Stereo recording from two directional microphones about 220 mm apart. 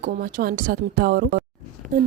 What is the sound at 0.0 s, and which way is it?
Speech, 40° right (ahead or behind).